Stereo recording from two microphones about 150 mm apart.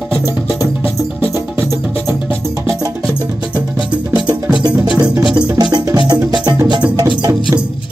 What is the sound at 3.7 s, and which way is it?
Music, 30° right (ahead or behind).